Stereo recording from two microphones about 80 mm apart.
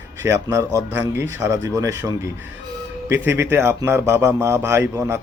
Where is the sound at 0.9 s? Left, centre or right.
Right.